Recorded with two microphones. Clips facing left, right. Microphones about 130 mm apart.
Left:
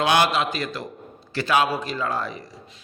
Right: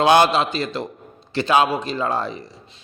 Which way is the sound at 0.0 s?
30° right (ahead or behind).